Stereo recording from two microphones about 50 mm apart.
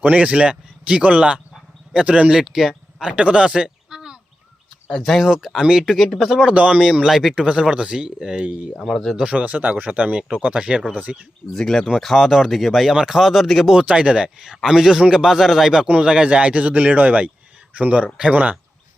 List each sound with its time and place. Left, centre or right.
0.2 s speech: right
2.3 s a man's voice: centre
3.0 s speech: right
5.2 s a man's voice: centre
5.9 s speech: centre
6.5 s speech: right
6.7 s a man's voice: centre
7.1 s speech: centre
7.4 s speech: centre
10.6 s speech: centre
10.9 s speech: right
11.5 s speech: centre
13.7 s a man's voice: centre
15.9 s speech: centre